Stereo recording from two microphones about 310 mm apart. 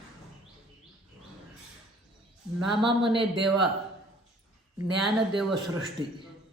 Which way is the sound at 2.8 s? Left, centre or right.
Centre.